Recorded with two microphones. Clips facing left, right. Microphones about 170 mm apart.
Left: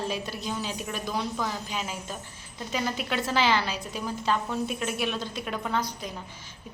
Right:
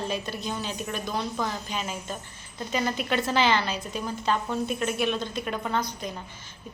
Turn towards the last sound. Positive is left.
turn(degrees=0)  # may be behind; listen again after turning